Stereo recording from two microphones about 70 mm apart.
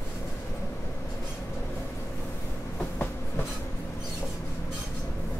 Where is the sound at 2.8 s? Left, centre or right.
Left.